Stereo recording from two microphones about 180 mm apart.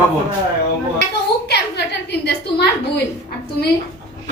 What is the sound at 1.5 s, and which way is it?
Speech, 65° left (ahead or behind).